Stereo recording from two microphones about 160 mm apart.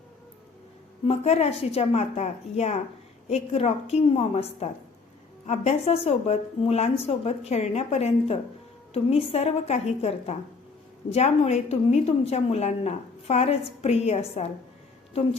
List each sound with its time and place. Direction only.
1.0 s a woman's voice: 40° left (ahead or behind)